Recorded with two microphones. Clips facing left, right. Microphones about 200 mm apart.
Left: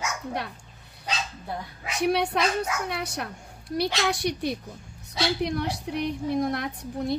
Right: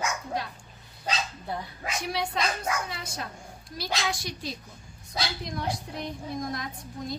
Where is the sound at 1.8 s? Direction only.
65° left (ahead or behind).